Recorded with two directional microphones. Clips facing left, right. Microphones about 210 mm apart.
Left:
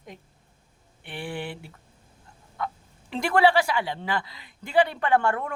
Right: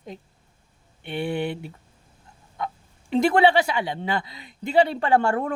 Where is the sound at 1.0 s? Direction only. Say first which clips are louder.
Right 7 dB; 20° right (ahead or behind).